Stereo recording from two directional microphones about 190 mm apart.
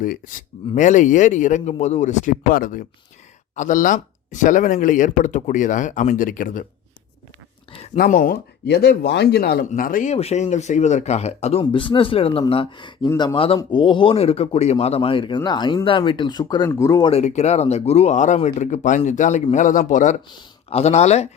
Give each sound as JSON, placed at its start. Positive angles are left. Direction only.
{"t": 0.0, "sound": "speech", "side_deg": 45}
{"t": 7.9, "sound": "speech", "side_deg": 50}
{"t": 17.1, "sound": "speech", "side_deg": 35}